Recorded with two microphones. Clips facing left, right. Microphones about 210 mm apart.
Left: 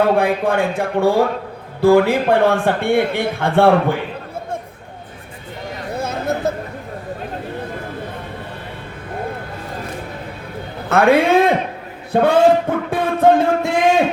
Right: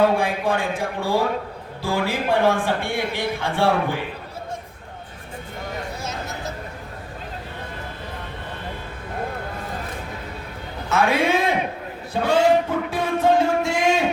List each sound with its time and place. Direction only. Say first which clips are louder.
0.0 s a man's voice: left 4 dB; 60° left (ahead or behind)
6.0 s a sound: left 10 dB; 55° left (ahead or behind)
10.8 s a man's voice: left 7 dB; 60° left (ahead or behind)
12.1 s music: left 5 dB; 55° left (ahead or behind)